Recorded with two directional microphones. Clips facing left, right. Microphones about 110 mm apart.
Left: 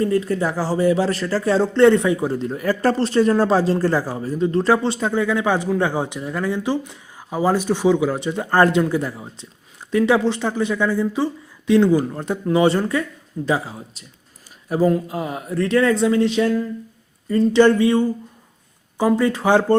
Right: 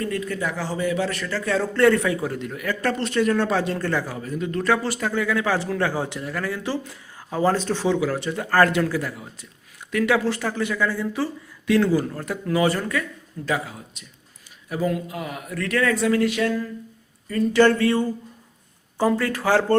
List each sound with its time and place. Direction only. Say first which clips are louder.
0.0 s a man's voice: left 7 dB; 30° left (ahead or behind)
17.6 s a sound: left 3 dB; 15° left (ahead or behind)
18.9 s a man's voice: left 4 dB; 15° left (ahead or behind)